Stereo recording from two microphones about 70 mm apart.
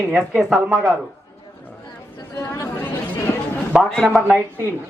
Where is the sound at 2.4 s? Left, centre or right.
Left.